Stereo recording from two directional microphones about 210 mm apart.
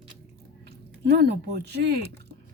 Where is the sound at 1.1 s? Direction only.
50° right (ahead or behind).